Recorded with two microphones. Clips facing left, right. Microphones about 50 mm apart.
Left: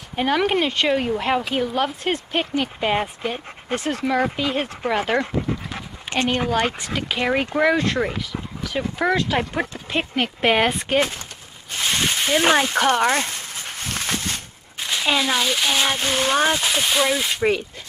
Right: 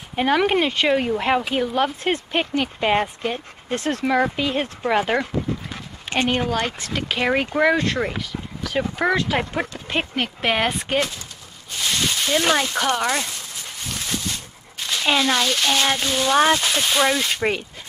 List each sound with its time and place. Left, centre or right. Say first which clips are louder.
0.1 s speech: right 1 dB; centre
3.2 s speech: right 1 dB; centre
4.0 s speech: right 2 dB; centre
6.0 s speech: right 1 dB; centre
6.5 s speech: left 2 dB; centre
7.2 s speech: right 1 dB; centre
11.8 s speech: left 1 dB; left
13.7 s a sound: left 2 dB; left
14.8 s a sound: left 1 dB; centre
15.0 s speech: right 1 dB; centre; by 16.3 s left
16.5 s speech: even; centre